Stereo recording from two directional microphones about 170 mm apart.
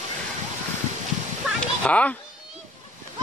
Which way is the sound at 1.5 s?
10° left (ahead or behind).